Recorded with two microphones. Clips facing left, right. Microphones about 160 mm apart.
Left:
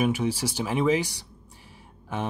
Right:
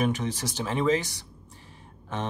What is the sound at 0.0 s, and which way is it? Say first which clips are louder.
Speech: left 3 dB; 10° left (ahead or behind).